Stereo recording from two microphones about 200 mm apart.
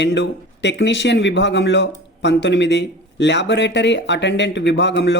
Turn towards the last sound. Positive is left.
turn(degrees=65)  # may be behind; listen again after turning